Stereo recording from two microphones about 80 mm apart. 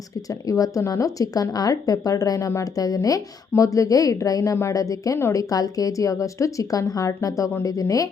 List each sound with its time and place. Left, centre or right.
0.3 s a woman's voice: left